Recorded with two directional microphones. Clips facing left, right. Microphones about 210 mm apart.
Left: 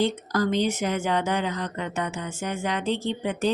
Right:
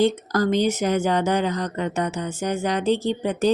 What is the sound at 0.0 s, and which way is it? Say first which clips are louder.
Speech: right 4 dB; 45° right (ahead or behind).